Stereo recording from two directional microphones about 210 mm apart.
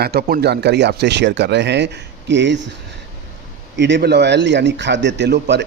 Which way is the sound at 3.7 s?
55° right (ahead or behind).